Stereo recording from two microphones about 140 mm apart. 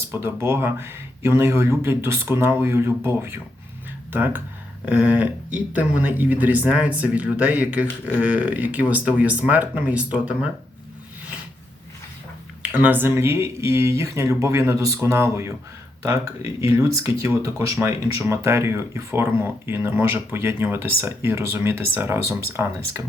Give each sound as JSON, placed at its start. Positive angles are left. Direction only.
{"t": 0.1, "sound": "speech", "side_deg": -15}
{"t": 12.6, "sound": "speech", "side_deg": -10}